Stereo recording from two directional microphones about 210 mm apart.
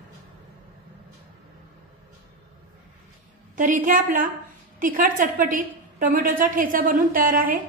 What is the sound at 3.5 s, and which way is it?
A woman's voice, 40° right (ahead or behind).